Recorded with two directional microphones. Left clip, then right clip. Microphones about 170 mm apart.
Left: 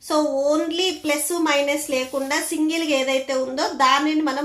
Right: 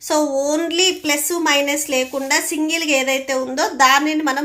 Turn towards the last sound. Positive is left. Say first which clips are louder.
# right 4 dB
turn(degrees=-40)  # may be behind; listen again after turning